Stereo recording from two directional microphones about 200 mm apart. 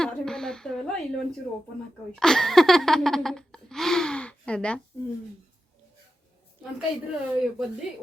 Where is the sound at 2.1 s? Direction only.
Centre (ahead or behind).